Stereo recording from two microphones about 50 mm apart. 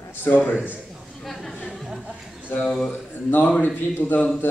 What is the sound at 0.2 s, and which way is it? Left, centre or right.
Speech, left.